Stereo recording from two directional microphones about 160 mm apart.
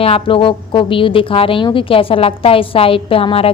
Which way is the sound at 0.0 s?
35° left (ahead or behind).